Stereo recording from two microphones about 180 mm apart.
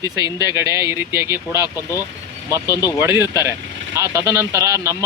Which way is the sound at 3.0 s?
15° right (ahead or behind).